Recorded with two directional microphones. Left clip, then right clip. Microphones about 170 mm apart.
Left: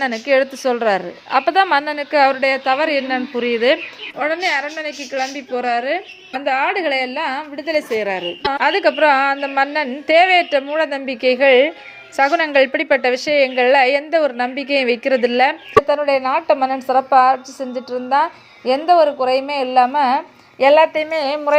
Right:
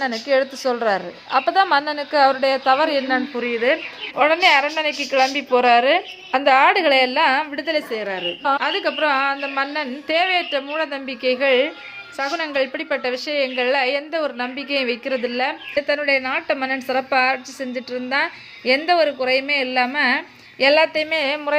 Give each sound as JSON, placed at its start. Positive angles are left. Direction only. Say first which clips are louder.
{"t": 0.0, "sound": "a woman's voice", "louder": "left 3 dB", "side_deg": 20}
{"t": 3.3, "sound": "speech", "louder": "left 7 dB", "side_deg": 35}
{"t": 4.2, "sound": "a woman's voice", "louder": "right 4 dB", "side_deg": -15}
{"t": 7.8, "sound": "a woman's voice", "louder": "left 4 dB", "side_deg": 30}
{"t": 16.0, "sound": "a woman's voice", "louder": "left 4 dB", "side_deg": 10}